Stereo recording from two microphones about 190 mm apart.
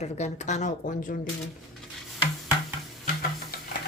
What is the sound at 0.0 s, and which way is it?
Speech, 35° left (ahead or behind).